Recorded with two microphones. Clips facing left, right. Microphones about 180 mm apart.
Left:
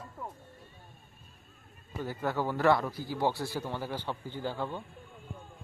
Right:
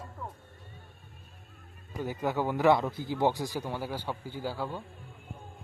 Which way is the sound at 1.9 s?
15° right (ahead or behind).